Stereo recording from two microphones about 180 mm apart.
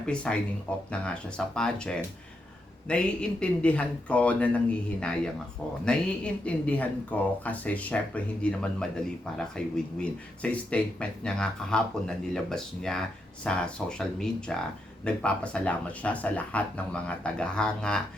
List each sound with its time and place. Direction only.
0.0 s speech: 5° left (ahead or behind)